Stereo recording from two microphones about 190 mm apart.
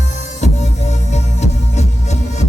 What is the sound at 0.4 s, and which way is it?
Music, 35° left (ahead or behind).